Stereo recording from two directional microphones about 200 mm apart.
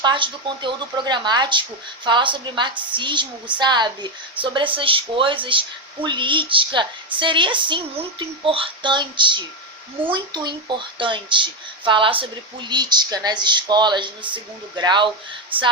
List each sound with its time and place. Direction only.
0.0 s speech: 25° right (ahead or behind)